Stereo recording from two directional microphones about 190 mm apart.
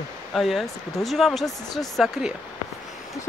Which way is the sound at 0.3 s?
Centre (ahead or behind).